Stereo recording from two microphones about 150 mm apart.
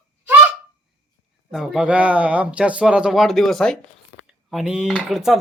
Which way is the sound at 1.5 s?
5° right (ahead or behind).